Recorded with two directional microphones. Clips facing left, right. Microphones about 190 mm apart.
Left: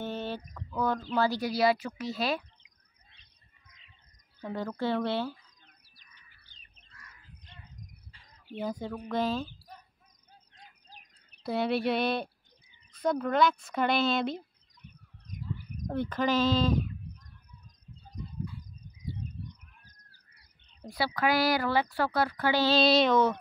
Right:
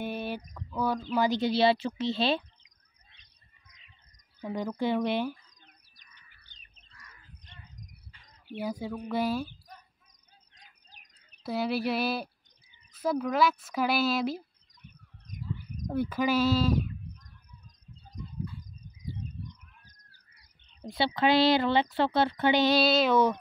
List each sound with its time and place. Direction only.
0.0 s a sound: 10° right (ahead or behind)
0.7 s speech: 10° right (ahead or behind); by 2.4 s 25° right (ahead or behind)
4.4 s speech: 15° right (ahead or behind)
8.5 s speech: 10° right (ahead or behind)
11.4 s speech: centre (ahead or behind)
15.4 s speech: 10° right (ahead or behind)
20.9 s speech: 25° right (ahead or behind)
22.8 s speech: 5° right (ahead or behind)